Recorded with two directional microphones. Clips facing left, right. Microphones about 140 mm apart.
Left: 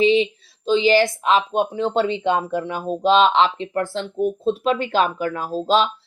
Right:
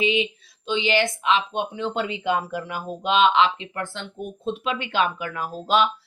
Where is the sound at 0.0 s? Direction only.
35° left (ahead or behind).